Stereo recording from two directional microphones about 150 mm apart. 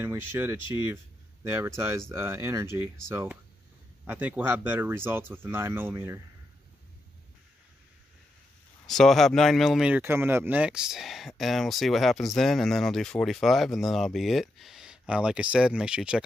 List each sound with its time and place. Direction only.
0.0 s speech: 15° right (ahead or behind)
8.8 s speech: centre (ahead or behind)